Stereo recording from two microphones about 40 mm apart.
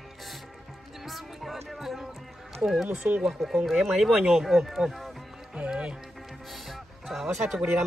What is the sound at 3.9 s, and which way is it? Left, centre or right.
Speech, centre.